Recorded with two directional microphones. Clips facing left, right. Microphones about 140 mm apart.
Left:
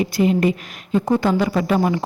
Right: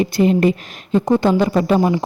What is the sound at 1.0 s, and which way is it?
Speech, 20° right (ahead or behind).